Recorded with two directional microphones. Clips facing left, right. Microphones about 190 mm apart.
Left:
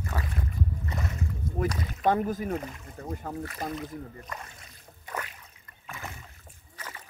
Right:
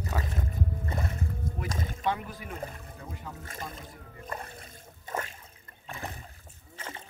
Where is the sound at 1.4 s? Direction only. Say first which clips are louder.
Left 3 dB; 45° right (ahead or behind).